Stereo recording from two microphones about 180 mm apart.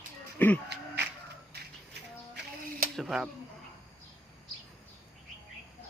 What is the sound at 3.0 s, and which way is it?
Speech, centre (ahead or behind).